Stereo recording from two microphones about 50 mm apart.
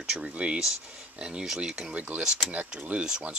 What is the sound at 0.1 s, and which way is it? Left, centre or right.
Speech, right.